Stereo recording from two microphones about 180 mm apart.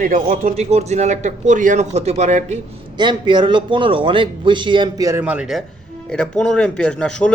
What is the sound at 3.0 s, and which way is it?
A man's voice, 25° right (ahead or behind).